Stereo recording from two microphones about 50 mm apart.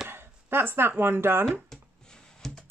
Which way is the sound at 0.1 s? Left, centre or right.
Right.